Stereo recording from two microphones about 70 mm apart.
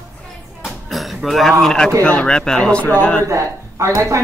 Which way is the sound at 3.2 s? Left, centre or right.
Right.